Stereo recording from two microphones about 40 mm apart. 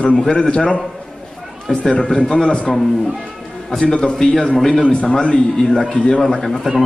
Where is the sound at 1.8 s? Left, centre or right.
Centre.